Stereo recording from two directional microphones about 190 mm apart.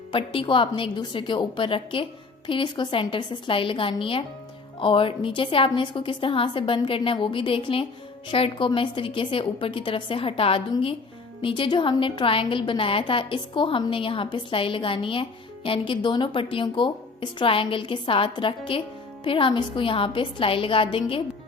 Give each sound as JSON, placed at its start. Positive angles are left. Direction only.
{"t": 0.1, "sound": "a woman's voice", "side_deg": 25}